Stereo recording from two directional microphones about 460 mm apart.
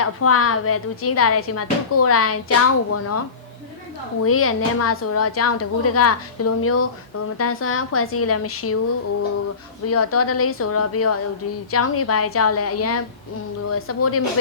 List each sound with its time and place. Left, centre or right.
0.0 s a woman's voice: left
9.8 s a woman's voice: left